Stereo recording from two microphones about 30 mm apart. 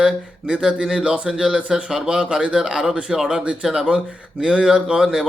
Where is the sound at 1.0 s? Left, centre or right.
Right.